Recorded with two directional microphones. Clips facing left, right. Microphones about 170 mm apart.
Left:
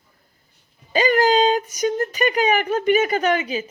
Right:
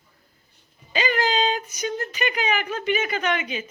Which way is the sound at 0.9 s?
40° left (ahead or behind).